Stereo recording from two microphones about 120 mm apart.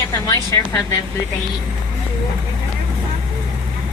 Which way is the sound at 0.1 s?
30° left (ahead or behind).